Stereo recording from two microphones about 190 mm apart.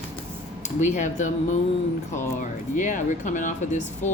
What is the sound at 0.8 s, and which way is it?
A woman's voice, 40° left (ahead or behind).